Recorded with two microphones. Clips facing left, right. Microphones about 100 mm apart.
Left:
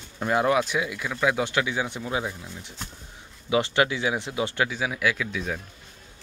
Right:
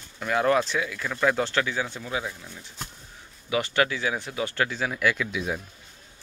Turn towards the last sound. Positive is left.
turn(degrees=-5)  # may be behind; listen again after turning